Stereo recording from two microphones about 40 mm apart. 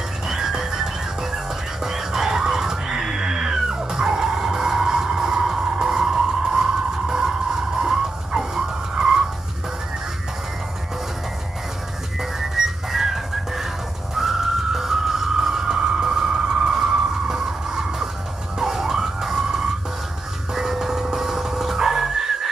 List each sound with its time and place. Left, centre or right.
0.3 s music: centre
7.8 s vehicle: centre
12.2 s music: centre
17.3 s a sound: centre
18.6 s emergency vehicle: centre
20.5 s music: centre